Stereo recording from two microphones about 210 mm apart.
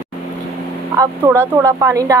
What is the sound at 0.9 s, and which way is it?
A woman's voice, 15° right (ahead or behind).